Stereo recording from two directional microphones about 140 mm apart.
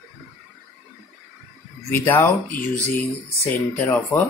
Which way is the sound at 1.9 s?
15° left (ahead or behind).